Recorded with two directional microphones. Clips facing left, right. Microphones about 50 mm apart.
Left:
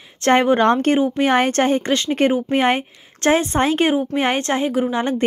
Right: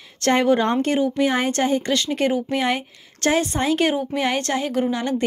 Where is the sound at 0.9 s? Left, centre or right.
Left.